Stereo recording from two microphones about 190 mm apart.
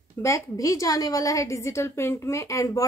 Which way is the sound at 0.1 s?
15° left (ahead or behind).